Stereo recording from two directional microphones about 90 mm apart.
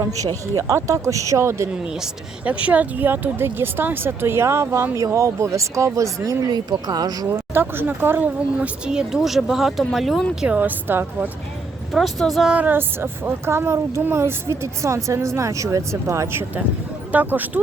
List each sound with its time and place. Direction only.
0.5 s speech: 35° right (ahead or behind)
2.4 s speech: 15° right (ahead or behind); by 7.3 s 45° right (ahead or behind)
7.3 s speech: 25° right (ahead or behind); by 10.2 s centre (ahead or behind)
10.4 s a woman's voice: 15° right (ahead or behind)
11.9 s speech: centre (ahead or behind)
12.5 s speech: 20° right (ahead or behind)
17.1 s speech: 20° right (ahead or behind)